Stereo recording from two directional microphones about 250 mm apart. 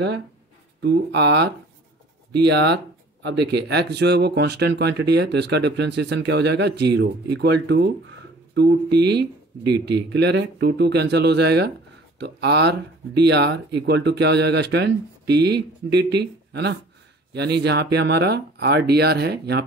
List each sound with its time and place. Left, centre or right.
0.7 s speech: right